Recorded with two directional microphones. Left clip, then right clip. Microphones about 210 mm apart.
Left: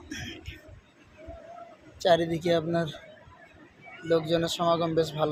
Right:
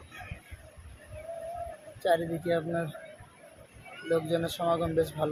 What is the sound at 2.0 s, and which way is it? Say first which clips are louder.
Speech: left 4 dB; 40° left (ahead or behind).